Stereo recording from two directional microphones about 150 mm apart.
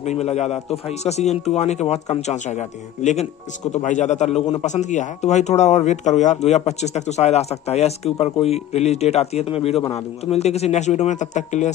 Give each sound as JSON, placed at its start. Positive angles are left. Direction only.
{"t": 0.0, "sound": "a man's voice", "side_deg": 45}